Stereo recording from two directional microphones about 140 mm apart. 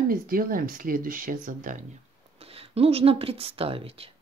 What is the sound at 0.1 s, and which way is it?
Speech, 90° right.